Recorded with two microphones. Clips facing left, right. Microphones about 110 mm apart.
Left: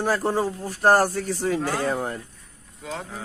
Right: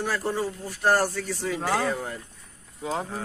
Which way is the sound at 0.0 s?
45° left (ahead or behind).